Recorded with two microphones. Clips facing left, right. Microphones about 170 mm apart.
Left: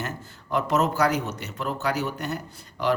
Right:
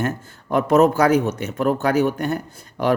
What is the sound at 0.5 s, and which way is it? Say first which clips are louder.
A man's voice: right 8 dB; 55° right (ahead or behind).